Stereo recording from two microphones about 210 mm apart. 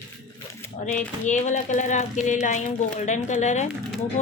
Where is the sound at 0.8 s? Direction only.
35° left (ahead or behind).